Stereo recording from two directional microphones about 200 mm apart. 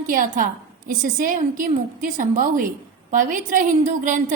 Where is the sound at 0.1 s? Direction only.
45° right (ahead or behind).